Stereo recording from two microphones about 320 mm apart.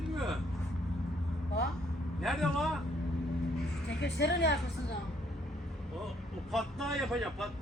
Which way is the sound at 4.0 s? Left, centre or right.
Left.